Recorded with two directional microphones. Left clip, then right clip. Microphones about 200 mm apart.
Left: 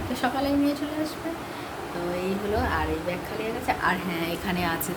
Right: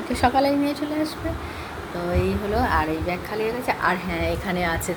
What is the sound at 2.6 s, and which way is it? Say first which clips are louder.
A woman's voice: right 8 dB; 20° right (ahead or behind).